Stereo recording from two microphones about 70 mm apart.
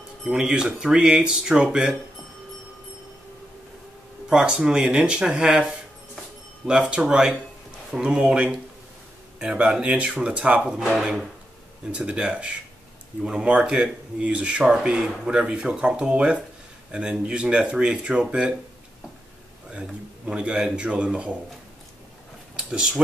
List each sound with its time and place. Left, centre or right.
0.2 s speech: centre
4.3 s speech: centre
11.9 s speech: centre
19.7 s speech: centre
22.6 s speech: centre